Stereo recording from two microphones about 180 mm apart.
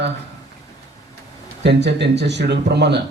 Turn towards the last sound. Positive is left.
turn(degrees=-70)  # may be behind; listen again after turning